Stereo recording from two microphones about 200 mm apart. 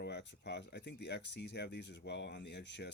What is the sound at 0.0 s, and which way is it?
Speech, 60° left (ahead or behind).